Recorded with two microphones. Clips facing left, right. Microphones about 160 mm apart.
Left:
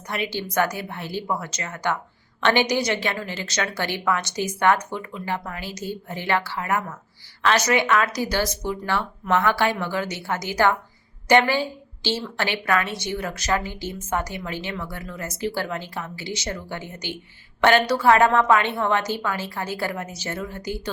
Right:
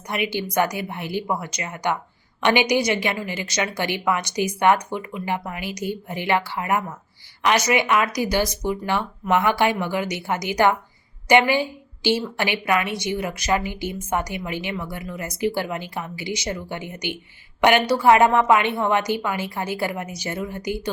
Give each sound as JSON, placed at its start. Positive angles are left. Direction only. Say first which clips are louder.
{"t": 0.1, "sound": "a woman's voice", "louder": "right 2 dB", "side_deg": -15}